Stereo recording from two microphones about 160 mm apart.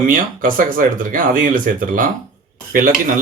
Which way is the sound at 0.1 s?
60° right (ahead or behind).